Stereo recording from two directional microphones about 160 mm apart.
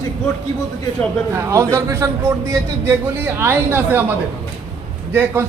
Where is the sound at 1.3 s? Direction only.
20° right (ahead or behind).